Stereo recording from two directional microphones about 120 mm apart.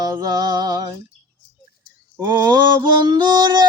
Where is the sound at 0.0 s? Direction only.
35° right (ahead or behind).